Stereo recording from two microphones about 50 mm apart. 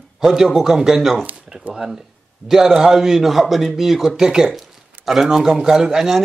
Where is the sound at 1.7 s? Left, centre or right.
Centre.